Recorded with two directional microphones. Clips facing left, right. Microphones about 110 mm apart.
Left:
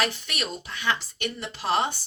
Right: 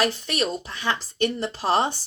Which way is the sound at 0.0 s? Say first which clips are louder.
Right 5 dB; 40° right (ahead or behind).